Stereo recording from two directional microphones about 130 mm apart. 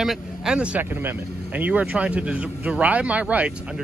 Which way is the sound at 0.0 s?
5° right (ahead or behind).